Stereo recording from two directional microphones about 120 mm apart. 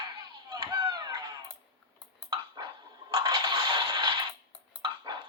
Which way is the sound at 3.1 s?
35° right (ahead or behind).